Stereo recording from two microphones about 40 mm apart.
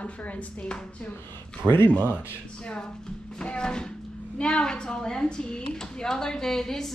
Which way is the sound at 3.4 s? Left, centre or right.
Left.